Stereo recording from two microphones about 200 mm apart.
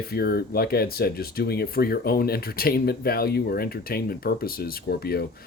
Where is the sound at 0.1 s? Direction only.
50° left (ahead or behind).